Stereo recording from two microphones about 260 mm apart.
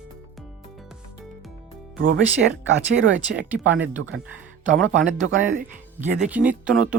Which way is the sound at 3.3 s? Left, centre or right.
Centre.